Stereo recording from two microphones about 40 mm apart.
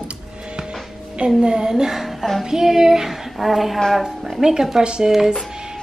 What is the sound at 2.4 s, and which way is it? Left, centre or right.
Child singing, centre.